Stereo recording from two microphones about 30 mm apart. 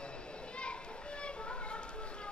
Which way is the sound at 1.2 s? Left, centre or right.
Left.